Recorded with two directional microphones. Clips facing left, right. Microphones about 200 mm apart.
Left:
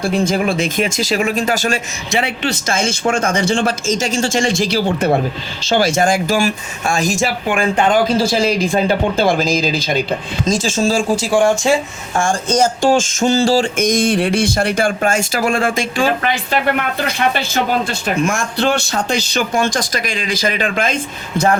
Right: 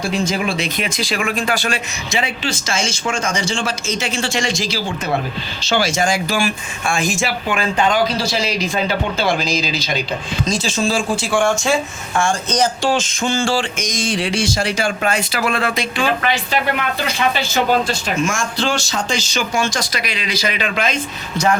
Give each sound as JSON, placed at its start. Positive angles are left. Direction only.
{"t": 0.0, "sound": "speech", "side_deg": 55}
{"t": 7.8, "sound": "speech", "side_deg": 50}
{"t": 12.1, "sound": "speech", "side_deg": 50}
{"t": 13.7, "sound": "speech", "side_deg": 55}